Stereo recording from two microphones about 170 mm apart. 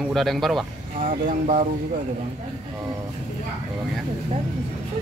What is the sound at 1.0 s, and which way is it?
Speech, 50° right (ahead or behind).